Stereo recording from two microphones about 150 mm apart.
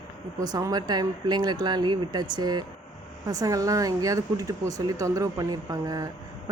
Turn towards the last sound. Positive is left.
turn(degrees=-25)  # may be behind; listen again after turning